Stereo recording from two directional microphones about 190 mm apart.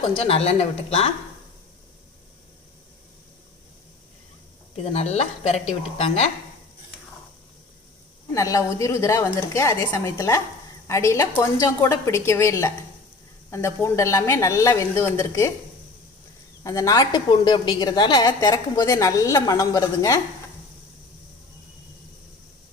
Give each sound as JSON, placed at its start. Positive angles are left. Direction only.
{"t": 0.2, "sound": "speech", "side_deg": 35}
{"t": 4.8, "sound": "speech", "side_deg": 35}
{"t": 8.3, "sound": "a woman's voice", "side_deg": 20}
{"t": 16.6, "sound": "a woman's voice", "side_deg": 15}